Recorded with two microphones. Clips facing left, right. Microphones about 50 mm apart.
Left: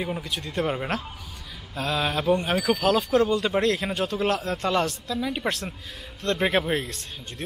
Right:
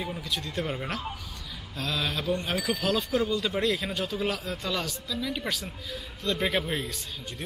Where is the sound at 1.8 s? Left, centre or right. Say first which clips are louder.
Left 5 dB; centre.